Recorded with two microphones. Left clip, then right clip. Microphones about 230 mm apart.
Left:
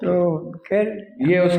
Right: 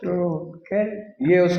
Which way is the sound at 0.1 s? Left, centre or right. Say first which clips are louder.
Left 5 dB; left.